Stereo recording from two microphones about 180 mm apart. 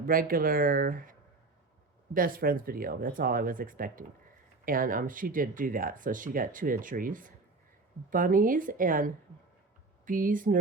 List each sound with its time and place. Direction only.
0.0 s speech: 50° right (ahead or behind)
2.1 s speech: 50° right (ahead or behind)